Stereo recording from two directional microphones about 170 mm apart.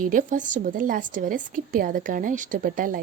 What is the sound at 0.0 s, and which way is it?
A woman's voice, 50° right (ahead or behind).